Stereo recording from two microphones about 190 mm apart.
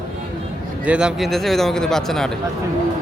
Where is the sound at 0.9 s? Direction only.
5° right (ahead or behind).